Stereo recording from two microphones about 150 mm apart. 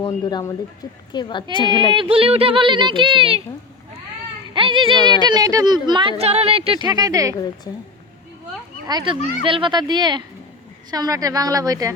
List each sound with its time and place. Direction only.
0.3 s speech: 25° left (ahead or behind)
1.9 s speech: 35° right (ahead or behind)
4.5 s speech: 35° right (ahead or behind)
8.9 s speech: 30° right (ahead or behind)